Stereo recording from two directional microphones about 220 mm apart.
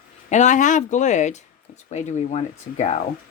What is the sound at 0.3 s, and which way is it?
Speech, 35° left (ahead or behind).